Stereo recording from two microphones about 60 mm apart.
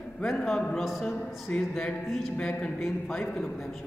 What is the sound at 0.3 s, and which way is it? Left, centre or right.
Speech, centre.